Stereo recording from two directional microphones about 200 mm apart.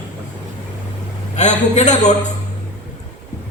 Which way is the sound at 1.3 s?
35° left (ahead or behind).